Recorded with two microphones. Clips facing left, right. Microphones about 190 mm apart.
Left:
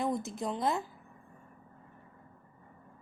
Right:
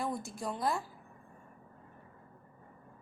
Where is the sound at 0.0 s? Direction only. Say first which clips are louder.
Left 4 dB; 20° left (ahead or behind).